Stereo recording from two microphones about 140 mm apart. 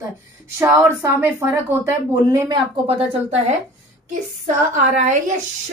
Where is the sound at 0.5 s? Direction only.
20° right (ahead or behind).